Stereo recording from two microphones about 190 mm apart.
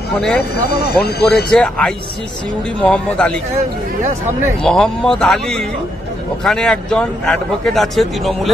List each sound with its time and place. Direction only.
0.7 s speech: 55° left (ahead or behind)
1.2 s speech: 5° left (ahead or behind)
4.6 s speech: 5° left (ahead or behind)